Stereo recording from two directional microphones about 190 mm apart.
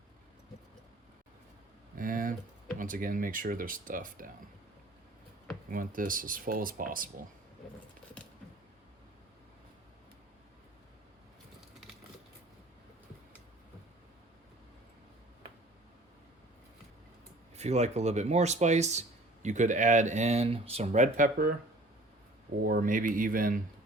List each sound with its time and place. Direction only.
2.0 s a sound: 45° right (ahead or behind)
2.7 s speech: 45° right (ahead or behind)
5.7 s speech: 45° right (ahead or behind)
8.2 s a sound: 5° left (ahead or behind)
17.6 s speech: 35° right (ahead or behind)
22.6 s speech: 45° right (ahead or behind)